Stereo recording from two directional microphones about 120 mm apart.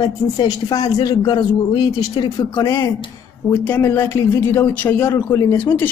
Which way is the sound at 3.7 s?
25° left (ahead or behind).